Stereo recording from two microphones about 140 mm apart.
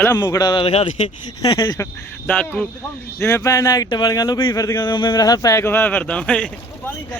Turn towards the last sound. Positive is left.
turn(degrees=5)  # may be behind; listen again after turning